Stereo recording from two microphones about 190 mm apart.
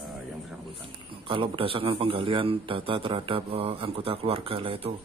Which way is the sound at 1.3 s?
30° right (ahead or behind).